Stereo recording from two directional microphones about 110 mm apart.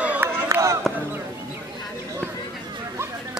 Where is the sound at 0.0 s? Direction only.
15° right (ahead or behind).